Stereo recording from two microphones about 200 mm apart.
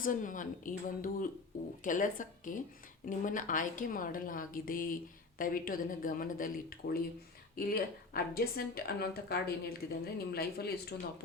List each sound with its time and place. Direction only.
0.0 s a woman's voice: 40° left (ahead or behind)